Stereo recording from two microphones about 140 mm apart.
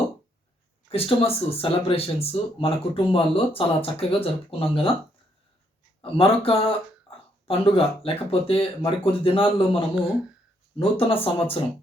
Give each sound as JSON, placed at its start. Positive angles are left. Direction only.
{"t": 0.9, "sound": "speech", "side_deg": 45}
{"t": 6.0, "sound": "speech", "side_deg": 40}
{"t": 9.9, "sound": "speech", "side_deg": -5}
{"t": 10.8, "sound": "speech", "side_deg": 40}